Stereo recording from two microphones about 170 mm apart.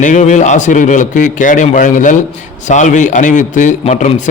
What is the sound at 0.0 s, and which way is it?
A man's voice, 45° left (ahead or behind).